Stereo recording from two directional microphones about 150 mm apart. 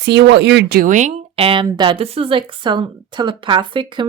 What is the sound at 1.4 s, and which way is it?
Speech, 40° right (ahead or behind).